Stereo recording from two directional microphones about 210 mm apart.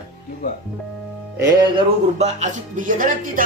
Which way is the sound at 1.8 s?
30° right (ahead or behind).